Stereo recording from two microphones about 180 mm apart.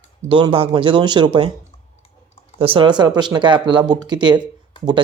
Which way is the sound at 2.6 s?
30° right (ahead or behind).